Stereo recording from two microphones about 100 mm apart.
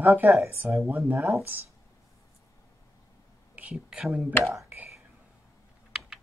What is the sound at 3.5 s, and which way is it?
Speech, 15° right (ahead or behind).